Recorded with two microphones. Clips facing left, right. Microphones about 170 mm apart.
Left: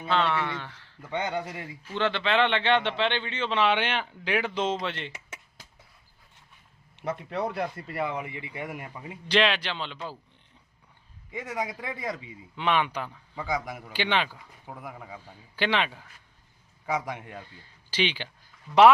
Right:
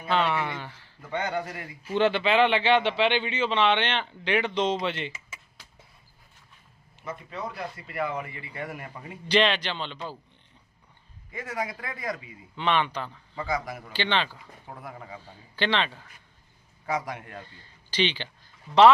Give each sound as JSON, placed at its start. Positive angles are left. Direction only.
{"t": 0.1, "sound": "speech", "side_deg": -5}
{"t": 1.1, "sound": "speech", "side_deg": 20}
{"t": 1.8, "sound": "a man's voice", "side_deg": -10}
{"t": 6.9, "sound": "a man's voice", "side_deg": 75}
{"t": 8.0, "sound": "a man's voice", "side_deg": 20}
{"t": 11.3, "sound": "speech", "side_deg": 20}
{"t": 12.5, "sound": "a man's voice", "side_deg": 5}
{"t": 13.5, "sound": "a man's voice", "side_deg": 20}
{"t": 16.8, "sound": "a man's voice", "side_deg": 20}